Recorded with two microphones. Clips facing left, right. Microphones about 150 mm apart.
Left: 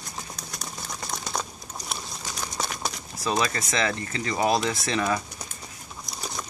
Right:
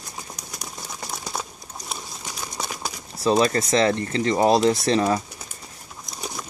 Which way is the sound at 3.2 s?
30° right (ahead or behind).